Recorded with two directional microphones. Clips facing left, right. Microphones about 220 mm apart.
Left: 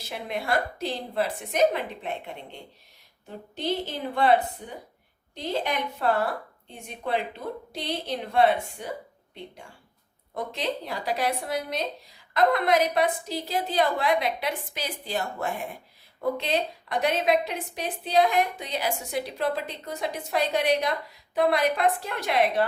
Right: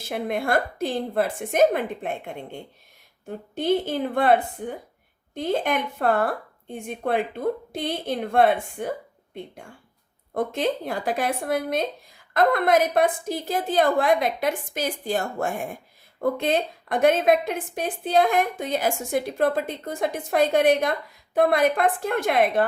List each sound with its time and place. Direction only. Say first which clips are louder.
0.0 s a woman's voice: right 6 dB; 50° right (ahead or behind)
10.3 s a woman's voice: right 6 dB; 50° right (ahead or behind)